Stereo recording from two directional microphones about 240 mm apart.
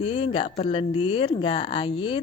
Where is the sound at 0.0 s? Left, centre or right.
Left.